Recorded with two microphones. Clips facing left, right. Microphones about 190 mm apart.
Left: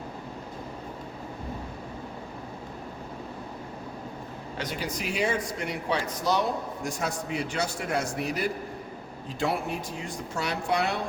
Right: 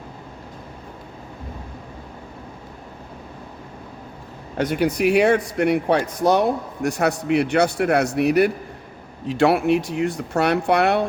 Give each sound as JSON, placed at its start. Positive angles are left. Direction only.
{"t": 4.5, "sound": "a man's voice", "side_deg": -55}